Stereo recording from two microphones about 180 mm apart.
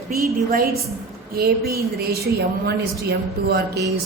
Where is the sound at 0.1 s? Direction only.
55° right (ahead or behind).